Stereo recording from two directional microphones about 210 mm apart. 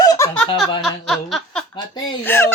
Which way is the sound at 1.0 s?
Centre (ahead or behind).